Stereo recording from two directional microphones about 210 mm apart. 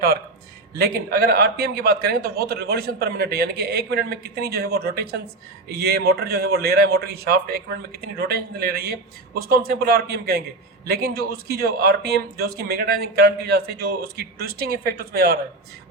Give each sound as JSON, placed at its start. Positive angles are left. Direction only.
{"t": 0.8, "sound": "a man's voice", "side_deg": -45}